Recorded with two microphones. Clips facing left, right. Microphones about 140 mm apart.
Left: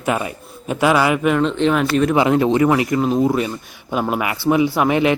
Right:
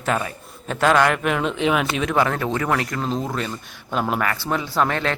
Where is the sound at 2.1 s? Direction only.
15° left (ahead or behind).